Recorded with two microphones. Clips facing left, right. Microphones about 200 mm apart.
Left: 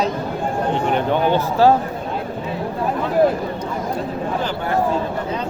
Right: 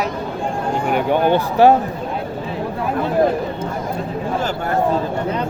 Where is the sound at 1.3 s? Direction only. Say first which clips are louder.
Right 2 dB; 20° right (ahead or behind).